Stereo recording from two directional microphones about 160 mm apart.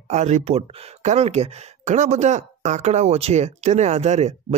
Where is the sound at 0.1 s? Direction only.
45° right (ahead or behind).